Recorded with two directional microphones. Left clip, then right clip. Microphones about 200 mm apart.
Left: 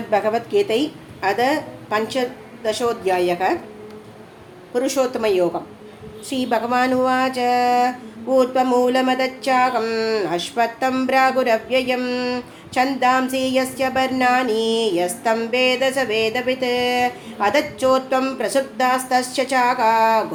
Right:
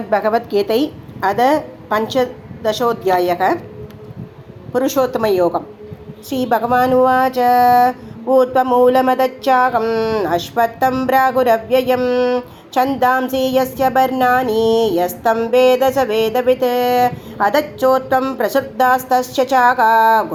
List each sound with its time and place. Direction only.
0.1 s a woman's voice: centre (ahead or behind)
2.6 s speech: 20° right (ahead or behind)
4.7 s speech: 20° right (ahead or behind)